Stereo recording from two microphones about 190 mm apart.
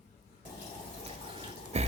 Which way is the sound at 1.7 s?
35° right (ahead or behind).